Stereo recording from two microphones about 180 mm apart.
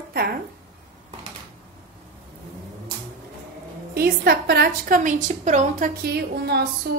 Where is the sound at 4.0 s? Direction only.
60° right (ahead or behind).